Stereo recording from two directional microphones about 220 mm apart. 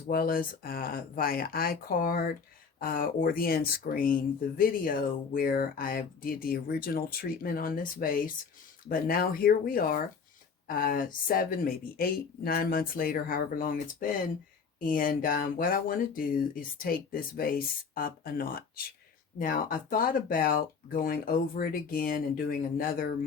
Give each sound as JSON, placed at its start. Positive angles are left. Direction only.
{"t": 0.1, "sound": "speech", "side_deg": 40}